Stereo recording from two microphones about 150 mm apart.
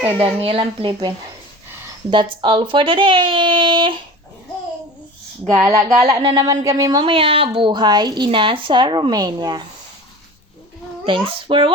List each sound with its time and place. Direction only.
0.2 s a woman's voice: 40° right (ahead or behind)
5.5 s speech: 20° right (ahead or behind)
7.0 s a woman's voice: 35° right (ahead or behind)
11.0 s a woman's voice: 35° right (ahead or behind)